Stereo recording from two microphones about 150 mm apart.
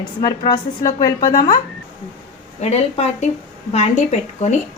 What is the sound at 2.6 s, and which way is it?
Speech, 50° left (ahead or behind).